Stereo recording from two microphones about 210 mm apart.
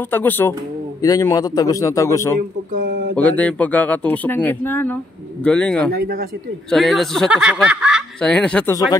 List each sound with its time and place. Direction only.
0.1 s speech: 10° left (ahead or behind)
2.7 s a sound: 45° right (ahead or behind)
3.2 s speech: 5° left (ahead or behind)
5.9 s speech: 45° right (ahead or behind)
6.7 s speech: centre (ahead or behind)